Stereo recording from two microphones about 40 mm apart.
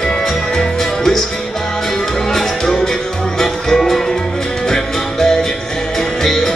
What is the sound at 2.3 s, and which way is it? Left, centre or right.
Music, centre.